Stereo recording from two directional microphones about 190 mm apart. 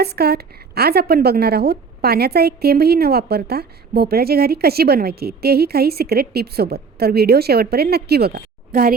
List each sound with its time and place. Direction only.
0.0 s a woman's voice: 55° right (ahead or behind)